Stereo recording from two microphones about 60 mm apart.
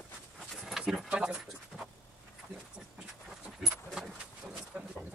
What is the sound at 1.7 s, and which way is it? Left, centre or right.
Vehicle, centre.